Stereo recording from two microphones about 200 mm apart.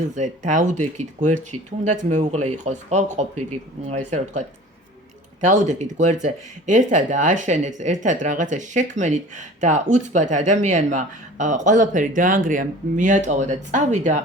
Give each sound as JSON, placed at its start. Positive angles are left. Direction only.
{"t": 0.2, "sound": "speech", "side_deg": -40}